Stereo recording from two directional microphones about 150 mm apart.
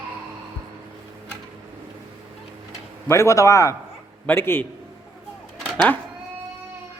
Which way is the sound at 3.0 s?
20° left (ahead or behind).